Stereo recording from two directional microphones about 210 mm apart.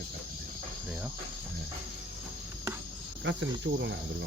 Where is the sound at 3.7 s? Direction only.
55° right (ahead or behind).